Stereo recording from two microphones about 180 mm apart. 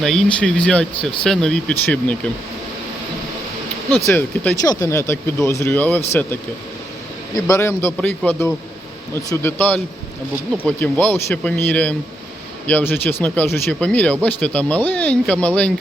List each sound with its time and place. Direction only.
0.0 s speech: 5° left (ahead or behind)
3.9 s speech: 10° left (ahead or behind)
7.3 s speech: 15° left (ahead or behind)